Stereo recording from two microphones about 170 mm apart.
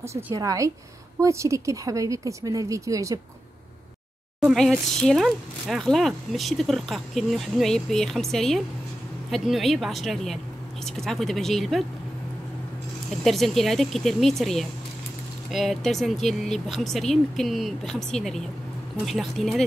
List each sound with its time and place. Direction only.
0.3 s speech: 20° right (ahead or behind)
4.4 s speech: centre (ahead or behind)
13.2 s speech: centre (ahead or behind)